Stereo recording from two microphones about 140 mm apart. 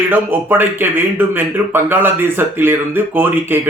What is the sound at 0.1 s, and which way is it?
Speech, 15° right (ahead or behind).